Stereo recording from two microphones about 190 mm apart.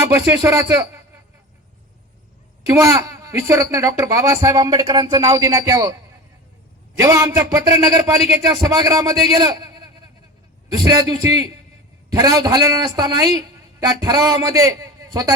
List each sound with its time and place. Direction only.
0.4 s speech: 15° right (ahead or behind)
2.6 s speech: 15° right (ahead or behind)
6.9 s a man's voice: 20° right (ahead or behind)